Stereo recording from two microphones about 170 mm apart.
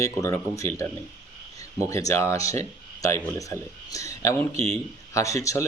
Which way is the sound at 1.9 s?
20° left (ahead or behind).